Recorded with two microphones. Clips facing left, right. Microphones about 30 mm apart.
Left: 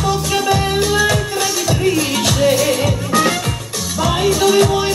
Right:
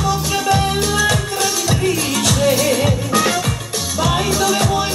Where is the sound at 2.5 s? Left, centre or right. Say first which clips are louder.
Left 1 dB; centre.